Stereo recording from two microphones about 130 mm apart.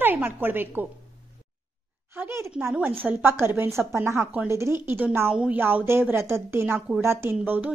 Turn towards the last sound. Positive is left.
turn(degrees=-15)  # may be behind; listen again after turning